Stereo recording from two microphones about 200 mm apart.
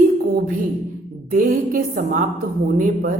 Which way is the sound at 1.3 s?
40° right (ahead or behind).